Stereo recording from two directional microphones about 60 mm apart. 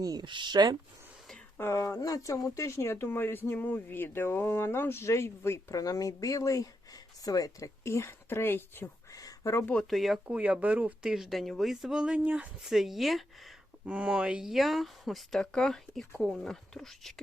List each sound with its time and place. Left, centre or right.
1.5 s speech: left
3.1 s speech: left
5.0 s speech: left
5.7 s speech: left
7.9 s speech: left
9.1 s a sound: left
9.8 s speech: centre
10.2 s speech: right
11.0 s speech: centre
12.2 s speech: right
12.6 s speech: centre
13.8 s speech: right
14.5 s speech: centre